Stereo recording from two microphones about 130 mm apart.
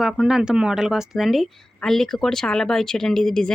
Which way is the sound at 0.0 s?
5° right (ahead or behind).